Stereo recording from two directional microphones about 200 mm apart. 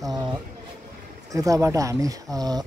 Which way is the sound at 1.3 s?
15° right (ahead or behind).